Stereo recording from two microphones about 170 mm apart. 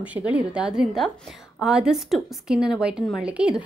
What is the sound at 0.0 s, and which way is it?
A woman's voice, 10° right (ahead or behind).